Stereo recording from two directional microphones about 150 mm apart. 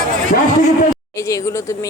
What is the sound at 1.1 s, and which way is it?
Speech, 20° left (ahead or behind).